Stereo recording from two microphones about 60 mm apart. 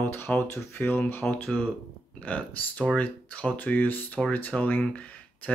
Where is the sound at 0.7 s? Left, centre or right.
Left.